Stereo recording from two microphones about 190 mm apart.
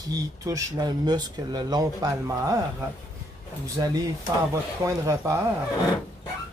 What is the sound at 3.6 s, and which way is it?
Speech, 20° right (ahead or behind).